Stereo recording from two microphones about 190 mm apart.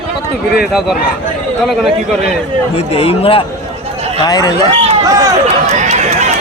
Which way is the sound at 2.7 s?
30° left (ahead or behind).